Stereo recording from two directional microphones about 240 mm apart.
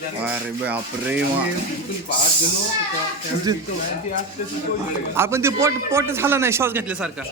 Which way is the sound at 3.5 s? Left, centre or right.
Centre.